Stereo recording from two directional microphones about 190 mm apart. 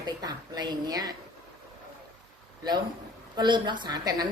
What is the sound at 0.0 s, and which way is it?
A woman's voice, 20° right (ahead or behind).